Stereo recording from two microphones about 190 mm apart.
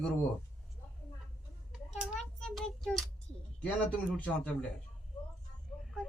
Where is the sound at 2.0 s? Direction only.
Centre (ahead or behind).